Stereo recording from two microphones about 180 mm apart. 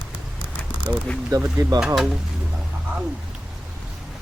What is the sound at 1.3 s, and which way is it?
Speech, 15° right (ahead or behind).